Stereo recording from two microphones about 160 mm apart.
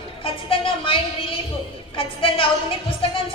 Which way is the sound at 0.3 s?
35° left (ahead or behind).